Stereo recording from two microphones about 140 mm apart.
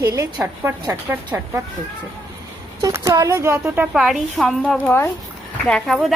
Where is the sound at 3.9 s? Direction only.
Centre (ahead or behind).